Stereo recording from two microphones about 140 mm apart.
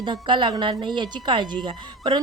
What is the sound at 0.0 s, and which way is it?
A woman's voice, 35° right (ahead or behind).